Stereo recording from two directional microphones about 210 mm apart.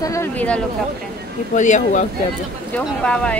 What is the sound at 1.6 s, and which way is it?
Speech, 35° left (ahead or behind).